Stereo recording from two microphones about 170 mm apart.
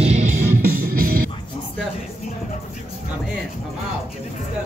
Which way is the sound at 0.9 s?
60° right (ahead or behind).